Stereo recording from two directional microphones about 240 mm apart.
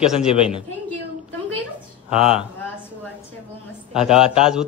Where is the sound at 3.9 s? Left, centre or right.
Centre.